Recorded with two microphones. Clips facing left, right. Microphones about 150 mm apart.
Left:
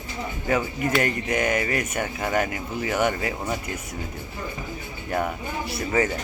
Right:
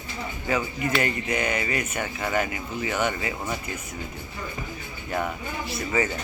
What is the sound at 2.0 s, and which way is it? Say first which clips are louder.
Speech: left 2 dB; 5° left (ahead or behind).